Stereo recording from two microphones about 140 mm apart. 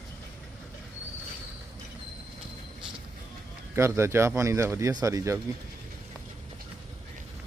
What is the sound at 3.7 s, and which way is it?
Speech, 20° right (ahead or behind).